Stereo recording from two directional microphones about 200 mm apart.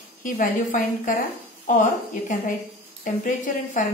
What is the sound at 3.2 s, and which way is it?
Speech, 40° left (ahead or behind).